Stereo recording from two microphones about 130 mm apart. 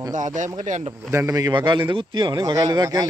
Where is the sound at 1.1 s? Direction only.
25° right (ahead or behind).